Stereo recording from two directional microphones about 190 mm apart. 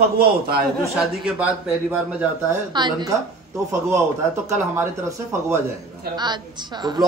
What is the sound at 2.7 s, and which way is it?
Speech, 20° right (ahead or behind).